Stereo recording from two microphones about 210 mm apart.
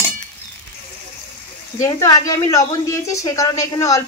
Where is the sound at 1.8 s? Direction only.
15° left (ahead or behind).